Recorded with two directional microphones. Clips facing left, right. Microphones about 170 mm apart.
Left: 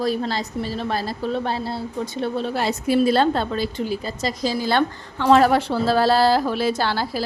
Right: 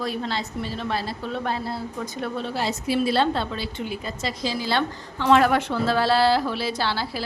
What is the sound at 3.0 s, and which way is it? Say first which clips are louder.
A woman's voice: left 4 dB; 45° left (ahead or behind).